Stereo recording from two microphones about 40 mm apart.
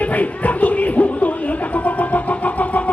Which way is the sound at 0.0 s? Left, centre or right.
Left.